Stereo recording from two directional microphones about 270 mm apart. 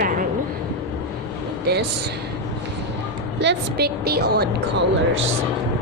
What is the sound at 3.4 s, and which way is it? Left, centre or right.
A woman's voice, right.